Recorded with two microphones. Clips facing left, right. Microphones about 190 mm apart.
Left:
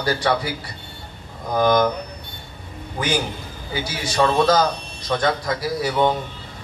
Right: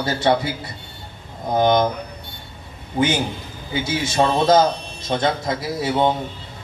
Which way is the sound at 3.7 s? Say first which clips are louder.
Right 3 dB; 25° right (ahead or behind).